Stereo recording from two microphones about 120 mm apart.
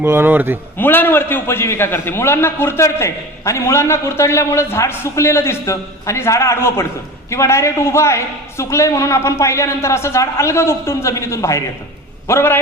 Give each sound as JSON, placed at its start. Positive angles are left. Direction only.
{"t": 0.0, "sound": "speech", "side_deg": -20}
{"t": 0.8, "sound": "a man's voice", "side_deg": 15}